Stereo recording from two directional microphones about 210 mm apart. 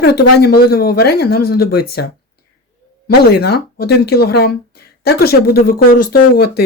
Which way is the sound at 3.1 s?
50° left (ahead or behind).